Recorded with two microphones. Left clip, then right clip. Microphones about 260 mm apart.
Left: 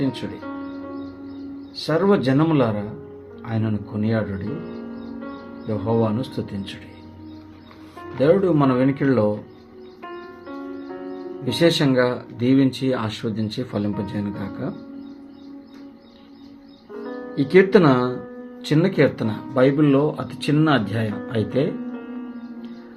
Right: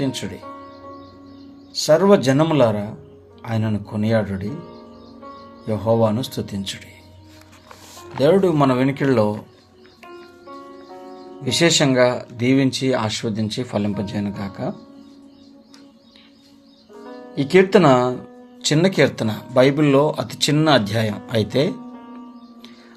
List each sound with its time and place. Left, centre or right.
1.8 s speech: right
5.6 s speech: right
8.2 s speech: right
11.4 s speech: right
17.3 s speech: right